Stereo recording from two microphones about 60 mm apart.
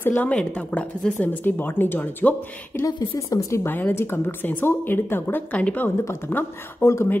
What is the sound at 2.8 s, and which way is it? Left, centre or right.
A woman's voice, left.